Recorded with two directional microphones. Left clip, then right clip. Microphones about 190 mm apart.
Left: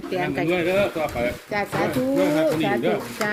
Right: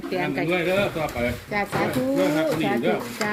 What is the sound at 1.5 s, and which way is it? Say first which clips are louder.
Speech: left 1 dB; 25° left (ahead or behind).